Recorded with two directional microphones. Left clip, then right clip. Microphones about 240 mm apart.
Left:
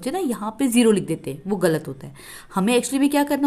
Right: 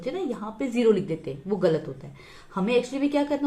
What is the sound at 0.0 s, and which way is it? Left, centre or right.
A woman's voice, left.